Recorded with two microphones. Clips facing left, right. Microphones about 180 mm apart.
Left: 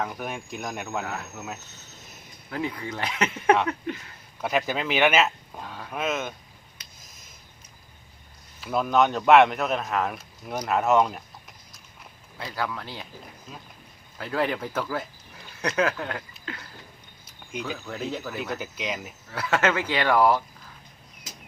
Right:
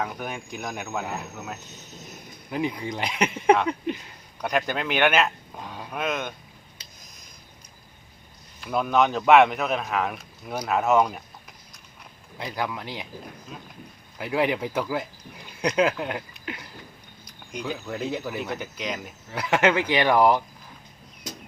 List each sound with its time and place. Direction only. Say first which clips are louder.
0.0 s speech: even; centre (ahead or behind)
2.5 s speech: right 3 dB; 15° right (ahead or behind)
4.4 s speech: even; 5° left (ahead or behind)
5.6 s a sound: right 2 dB; 15° right (ahead or behind)
5.9 s speech: even; 5° left (ahead or behind)
6.8 s a sound: right 2 dB; 30° right (ahead or behind)
8.6 s speech: even; centre (ahead or behind)
12.4 s speech: right 1 dB; 20° right (ahead or behind)
14.2 s speech: right 2 dB; 15° right (ahead or behind)
17.7 s speech: right 2 dB; 10° right (ahead or behind)
18.5 s speech: even; centre (ahead or behind)
19.3 s speech: right 3 dB; 15° right (ahead or behind)